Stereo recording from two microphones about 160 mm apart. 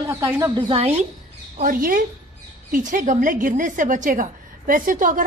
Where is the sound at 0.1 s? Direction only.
15° right (ahead or behind).